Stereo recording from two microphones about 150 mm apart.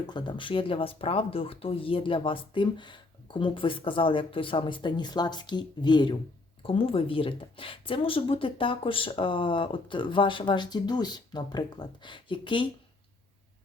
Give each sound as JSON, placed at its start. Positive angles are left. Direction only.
{"t": 0.1, "sound": "speech", "side_deg": 30}